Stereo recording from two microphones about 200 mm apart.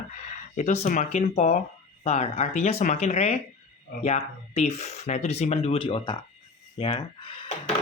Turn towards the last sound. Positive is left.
turn(degrees=25)  # may be behind; listen again after turning